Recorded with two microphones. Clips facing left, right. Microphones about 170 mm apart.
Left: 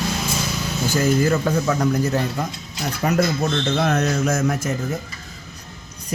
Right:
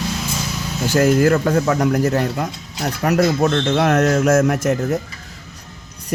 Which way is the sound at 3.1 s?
70° right (ahead or behind).